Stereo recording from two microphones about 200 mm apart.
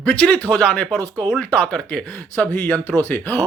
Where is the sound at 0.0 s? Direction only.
5° left (ahead or behind).